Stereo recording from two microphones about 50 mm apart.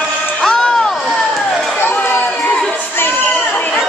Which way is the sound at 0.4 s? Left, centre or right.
Centre.